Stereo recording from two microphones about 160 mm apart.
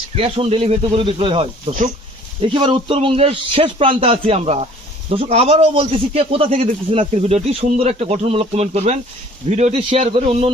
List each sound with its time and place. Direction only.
0.2 s speech: 35° right (ahead or behind)